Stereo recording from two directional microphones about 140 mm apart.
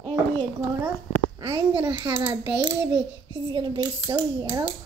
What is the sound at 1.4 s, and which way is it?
Speech, 40° right (ahead or behind).